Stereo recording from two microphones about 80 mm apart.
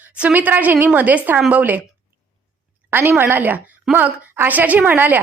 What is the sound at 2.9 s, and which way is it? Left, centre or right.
A woman's voice, right.